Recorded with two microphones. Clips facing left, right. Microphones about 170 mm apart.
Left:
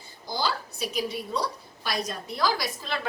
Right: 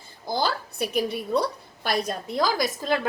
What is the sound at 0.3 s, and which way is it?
A woman's voice, 55° right (ahead or behind).